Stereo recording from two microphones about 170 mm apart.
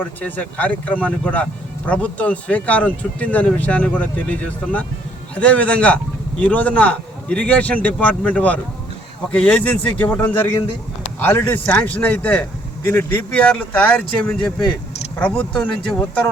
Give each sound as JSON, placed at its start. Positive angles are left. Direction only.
{"t": 0.0, "sound": "speech", "side_deg": 10}